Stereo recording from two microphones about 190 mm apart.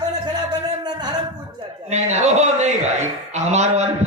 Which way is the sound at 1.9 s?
35° right (ahead or behind).